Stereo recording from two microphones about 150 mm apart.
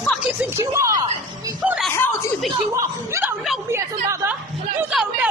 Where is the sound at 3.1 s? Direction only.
15° right (ahead or behind).